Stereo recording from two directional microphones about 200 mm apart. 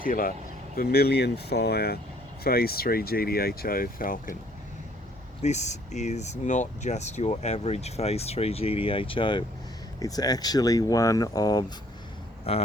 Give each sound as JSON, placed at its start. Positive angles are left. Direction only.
{"t": 0.0, "sound": "speech", "side_deg": 45}
{"t": 5.4, "sound": "speech", "side_deg": 35}
{"t": 12.5, "sound": "speech", "side_deg": 30}